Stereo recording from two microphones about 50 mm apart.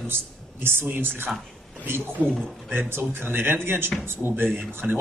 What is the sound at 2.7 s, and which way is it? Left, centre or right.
Speech, right.